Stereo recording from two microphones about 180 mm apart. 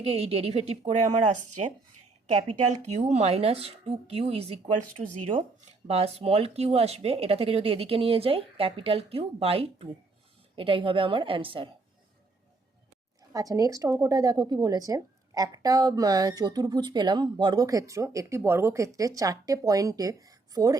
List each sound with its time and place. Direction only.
0.0 s speech: 35° right (ahead or behind)
13.3 s speech: 20° right (ahead or behind)